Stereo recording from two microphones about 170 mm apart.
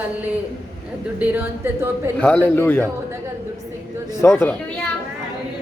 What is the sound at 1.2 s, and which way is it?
Speech, 10° right (ahead or behind).